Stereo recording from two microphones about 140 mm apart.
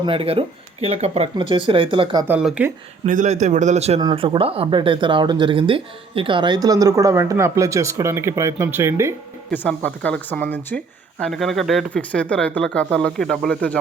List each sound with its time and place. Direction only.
0.0 s speech: 40° right (ahead or behind)
2.2 s speech: 10° right (ahead or behind)
3.1 s a man's voice: 60° right (ahead or behind); by 9.1 s 20° right (ahead or behind)
9.5 s speech: 10° left (ahead or behind)